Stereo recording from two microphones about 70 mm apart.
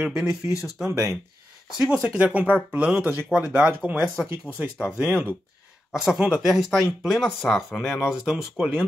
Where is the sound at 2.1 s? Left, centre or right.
Centre.